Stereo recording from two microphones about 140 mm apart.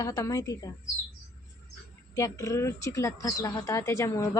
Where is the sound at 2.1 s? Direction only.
25° left (ahead or behind).